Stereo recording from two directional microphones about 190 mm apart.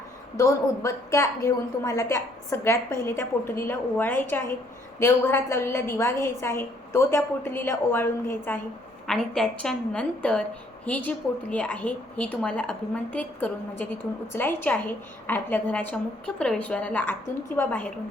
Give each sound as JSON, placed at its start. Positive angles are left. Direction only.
{"t": 0.3, "sound": "a woman's voice", "side_deg": 15}